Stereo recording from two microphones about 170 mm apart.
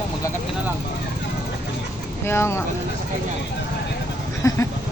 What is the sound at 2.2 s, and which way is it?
Speech, 15° left (ahead or behind).